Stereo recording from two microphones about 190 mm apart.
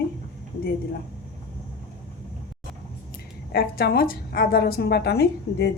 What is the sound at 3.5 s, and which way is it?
Speech, 55° left (ahead or behind).